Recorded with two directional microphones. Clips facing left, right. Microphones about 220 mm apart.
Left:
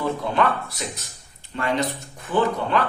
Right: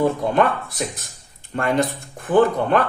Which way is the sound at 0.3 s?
50° right (ahead or behind).